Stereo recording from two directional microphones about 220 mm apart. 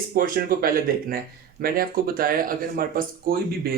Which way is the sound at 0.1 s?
40° right (ahead or behind).